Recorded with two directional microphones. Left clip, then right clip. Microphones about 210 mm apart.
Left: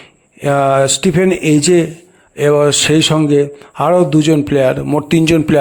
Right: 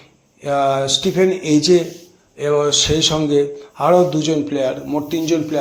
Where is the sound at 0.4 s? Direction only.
45° left (ahead or behind).